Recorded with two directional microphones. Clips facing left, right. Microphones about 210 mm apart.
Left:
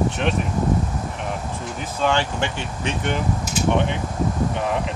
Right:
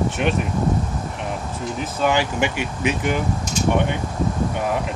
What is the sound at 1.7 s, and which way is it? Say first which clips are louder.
Speech: right 1 dB; 10° right (ahead or behind).